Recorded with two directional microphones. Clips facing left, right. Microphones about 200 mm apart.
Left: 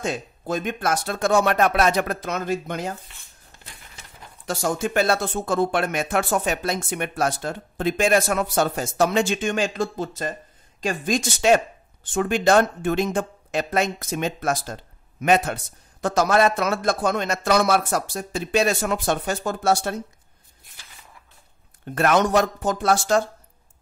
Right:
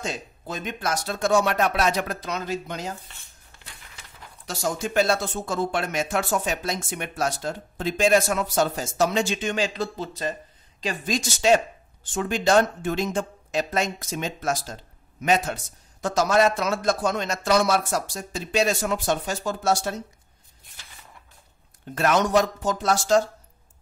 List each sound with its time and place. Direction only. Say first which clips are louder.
0.0 s speech: left 4 dB; 50° left (ahead or behind)
4.5 s speech: left 4 dB; 55° left (ahead or behind)
21.9 s speech: left 2 dB; 55° left (ahead or behind)